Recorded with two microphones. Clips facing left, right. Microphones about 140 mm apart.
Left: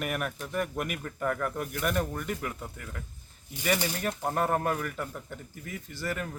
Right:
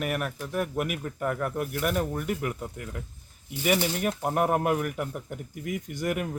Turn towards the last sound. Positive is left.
turn(degrees=-15)  # may be behind; listen again after turning